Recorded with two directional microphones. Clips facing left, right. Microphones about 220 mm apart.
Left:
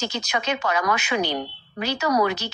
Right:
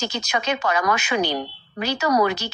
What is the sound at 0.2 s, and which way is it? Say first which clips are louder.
A woman's voice: right 2 dB; 40° right (ahead or behind).